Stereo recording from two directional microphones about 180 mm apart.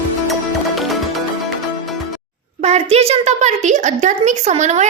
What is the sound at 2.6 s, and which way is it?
A woman's voice, 35° right (ahead or behind).